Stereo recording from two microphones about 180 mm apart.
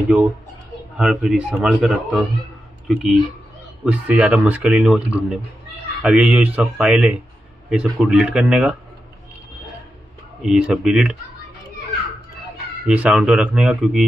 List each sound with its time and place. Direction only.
0.9 s a man's voice: 5° right (ahead or behind)
10.4 s a man's voice: 5° right (ahead or behind)
12.8 s a man's voice: 5° right (ahead or behind)